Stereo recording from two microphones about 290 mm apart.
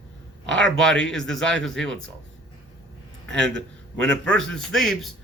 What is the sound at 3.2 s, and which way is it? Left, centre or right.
A man's voice, centre.